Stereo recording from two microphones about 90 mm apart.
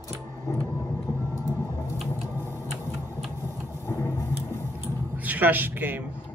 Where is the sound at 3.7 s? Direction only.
30° left (ahead or behind).